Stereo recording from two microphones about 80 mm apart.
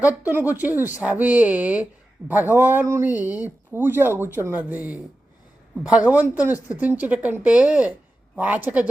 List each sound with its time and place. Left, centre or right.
0.2 s a woman's voice: right